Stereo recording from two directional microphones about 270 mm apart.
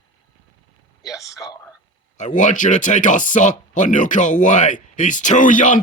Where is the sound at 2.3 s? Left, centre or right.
Left.